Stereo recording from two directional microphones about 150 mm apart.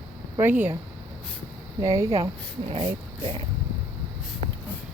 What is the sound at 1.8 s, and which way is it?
Speech, 20° right (ahead or behind).